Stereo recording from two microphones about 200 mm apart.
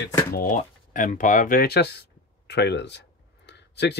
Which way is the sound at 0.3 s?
45° left (ahead or behind).